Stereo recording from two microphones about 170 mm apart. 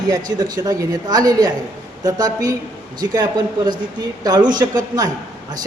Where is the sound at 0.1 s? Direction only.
25° right (ahead or behind).